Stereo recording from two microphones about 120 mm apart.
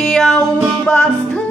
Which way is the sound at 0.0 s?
Centre (ahead or behind).